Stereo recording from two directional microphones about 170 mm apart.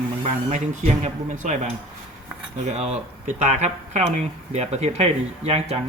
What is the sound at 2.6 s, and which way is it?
Speech, 40° right (ahead or behind).